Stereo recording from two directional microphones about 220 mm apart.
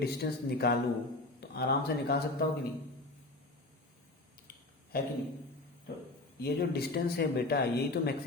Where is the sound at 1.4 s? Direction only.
45° left (ahead or behind).